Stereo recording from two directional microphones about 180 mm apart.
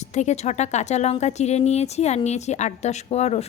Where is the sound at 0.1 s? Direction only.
40° left (ahead or behind).